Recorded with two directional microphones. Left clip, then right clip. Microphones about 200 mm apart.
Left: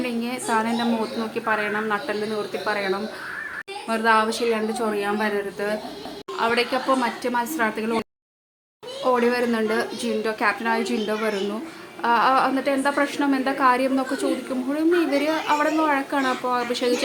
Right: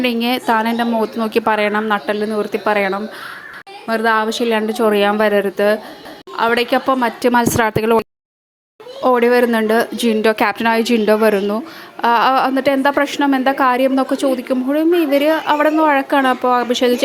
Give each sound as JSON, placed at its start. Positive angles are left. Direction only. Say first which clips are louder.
{"t": 0.0, "sound": "a woman's voice", "louder": "right 10 dB", "side_deg": -35}
{"t": 9.0, "sound": "a woman's voice", "louder": "right 8 dB", "side_deg": -35}